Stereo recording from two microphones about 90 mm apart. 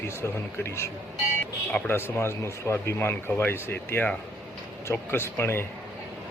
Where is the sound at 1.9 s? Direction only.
25° left (ahead or behind).